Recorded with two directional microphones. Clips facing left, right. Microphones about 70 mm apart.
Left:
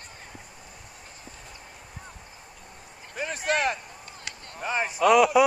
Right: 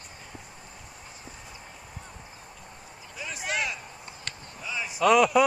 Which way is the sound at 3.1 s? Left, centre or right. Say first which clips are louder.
Left 6 dB; left.